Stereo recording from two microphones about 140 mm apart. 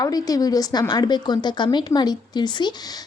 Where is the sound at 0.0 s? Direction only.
25° left (ahead or behind).